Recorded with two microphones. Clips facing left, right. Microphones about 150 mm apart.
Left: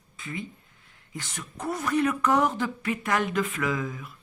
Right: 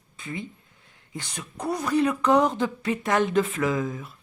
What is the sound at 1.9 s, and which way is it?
Speech, 30° right (ahead or behind).